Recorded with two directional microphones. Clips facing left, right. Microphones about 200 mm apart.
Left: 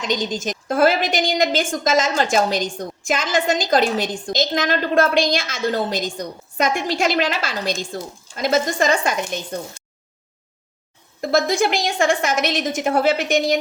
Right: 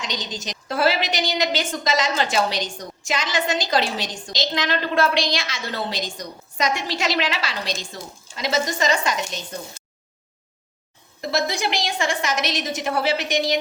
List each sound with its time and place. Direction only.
0.0 s a woman's voice: 50° left (ahead or behind)
11.2 s a woman's voice: 50° left (ahead or behind)